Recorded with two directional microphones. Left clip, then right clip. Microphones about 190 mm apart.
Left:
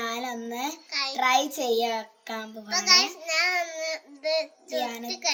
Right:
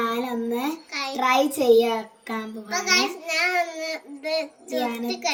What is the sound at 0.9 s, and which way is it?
A child's voice, 20° right (ahead or behind).